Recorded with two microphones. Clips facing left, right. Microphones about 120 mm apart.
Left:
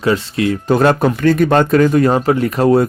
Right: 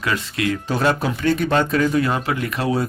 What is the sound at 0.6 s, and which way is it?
Speech, 50° left (ahead or behind).